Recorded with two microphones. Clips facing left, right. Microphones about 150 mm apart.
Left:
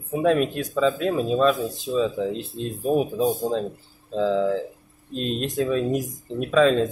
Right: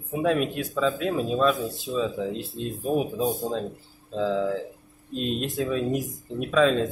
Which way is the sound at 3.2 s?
20° left (ahead or behind).